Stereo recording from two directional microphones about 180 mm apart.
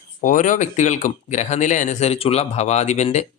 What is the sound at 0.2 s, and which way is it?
Speech, 45° left (ahead or behind).